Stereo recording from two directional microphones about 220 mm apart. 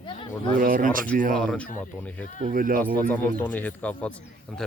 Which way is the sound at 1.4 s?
5° left (ahead or behind).